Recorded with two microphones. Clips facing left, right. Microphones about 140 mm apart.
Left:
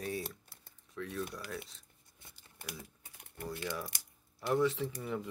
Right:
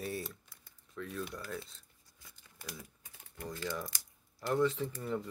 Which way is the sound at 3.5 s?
20° left (ahead or behind).